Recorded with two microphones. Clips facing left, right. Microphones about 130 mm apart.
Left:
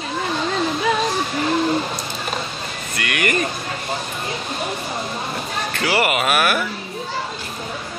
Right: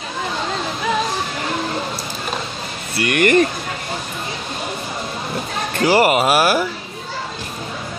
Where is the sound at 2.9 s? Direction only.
45° right (ahead or behind).